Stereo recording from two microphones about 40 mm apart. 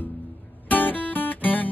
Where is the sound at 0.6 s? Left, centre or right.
Left.